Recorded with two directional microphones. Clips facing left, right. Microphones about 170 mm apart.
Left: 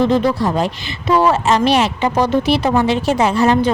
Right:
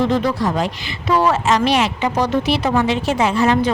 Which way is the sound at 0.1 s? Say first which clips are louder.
Left 3 dB; 25° left (ahead or behind).